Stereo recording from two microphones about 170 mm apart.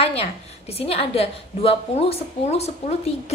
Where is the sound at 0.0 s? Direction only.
35° left (ahead or behind).